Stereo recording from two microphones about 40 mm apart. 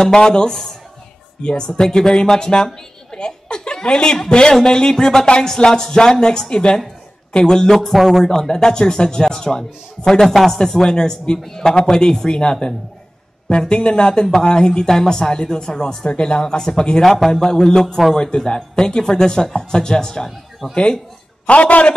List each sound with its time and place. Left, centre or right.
0.0 s a man's voice: centre
8.2 s a man's voice: centre
17.2 s speech: centre
17.6 s a man's voice: centre
21.5 s a man's voice: left